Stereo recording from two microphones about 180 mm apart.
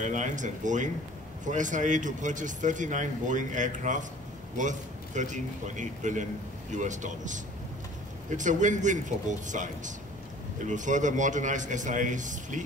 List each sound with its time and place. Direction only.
0.0 s speech: 45° right (ahead or behind)